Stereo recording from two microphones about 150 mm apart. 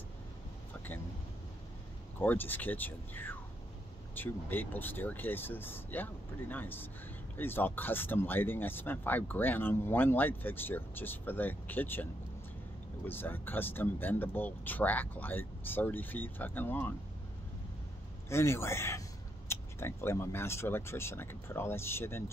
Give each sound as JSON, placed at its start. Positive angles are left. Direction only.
{"t": 2.1, "sound": "speech", "side_deg": 10}
{"t": 18.3, "sound": "speech", "side_deg": 15}